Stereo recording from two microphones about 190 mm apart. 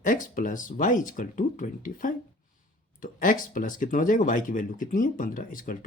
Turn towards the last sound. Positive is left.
turn(degrees=45)  # may be behind; listen again after turning